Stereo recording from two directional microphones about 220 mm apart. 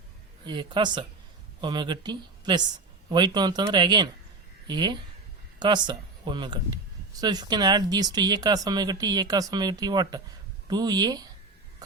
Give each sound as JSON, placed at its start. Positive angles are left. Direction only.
{"t": 0.4, "sound": "speech", "side_deg": -20}